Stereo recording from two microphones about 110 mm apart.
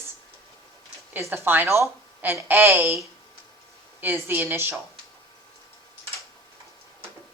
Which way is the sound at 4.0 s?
20° right (ahead or behind).